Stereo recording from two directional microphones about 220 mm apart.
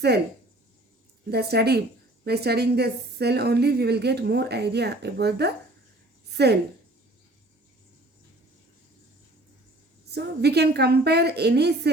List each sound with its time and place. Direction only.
1.3 s a woman's voice: 45° right (ahead or behind)
10.1 s a woman's voice: 50° right (ahead or behind)